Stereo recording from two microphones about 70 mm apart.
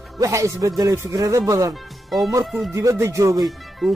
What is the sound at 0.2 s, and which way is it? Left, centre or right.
A man's voice, right.